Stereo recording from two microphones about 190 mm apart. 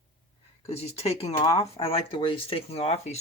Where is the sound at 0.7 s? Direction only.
35° left (ahead or behind).